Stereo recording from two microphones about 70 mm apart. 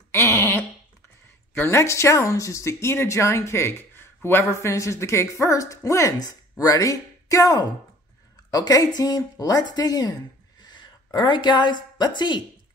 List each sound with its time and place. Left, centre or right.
0.1 s a sound: left
1.5 s speech: left
11.1 s a woman's voice: left